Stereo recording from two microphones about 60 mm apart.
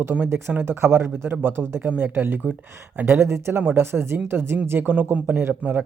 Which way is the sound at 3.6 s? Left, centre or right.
Right.